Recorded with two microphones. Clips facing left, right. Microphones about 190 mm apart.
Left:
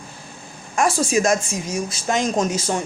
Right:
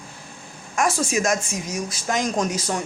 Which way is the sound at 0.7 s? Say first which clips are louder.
Left 3 dB; 30° left (ahead or behind).